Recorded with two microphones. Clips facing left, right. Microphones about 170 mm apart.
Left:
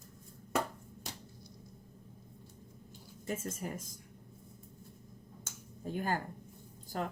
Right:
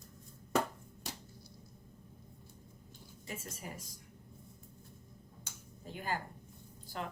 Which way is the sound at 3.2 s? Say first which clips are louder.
Left 7 dB; 45° left (ahead or behind).